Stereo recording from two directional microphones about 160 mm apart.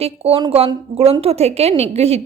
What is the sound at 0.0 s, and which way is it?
A woman's voice, 40° right (ahead or behind).